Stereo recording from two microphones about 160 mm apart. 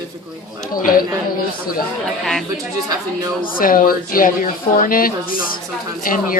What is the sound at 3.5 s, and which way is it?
Speech, 60° left (ahead or behind).